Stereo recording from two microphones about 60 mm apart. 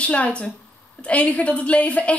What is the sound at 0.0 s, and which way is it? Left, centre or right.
Speech, left.